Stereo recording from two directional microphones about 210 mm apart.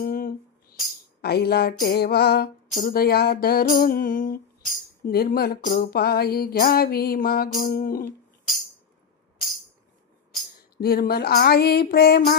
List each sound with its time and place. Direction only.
0.0 s music: 45° left (ahead or behind)
10.8 s music: 45° left (ahead or behind)